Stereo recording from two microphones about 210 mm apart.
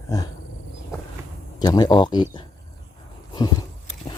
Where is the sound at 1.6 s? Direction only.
20° left (ahead or behind).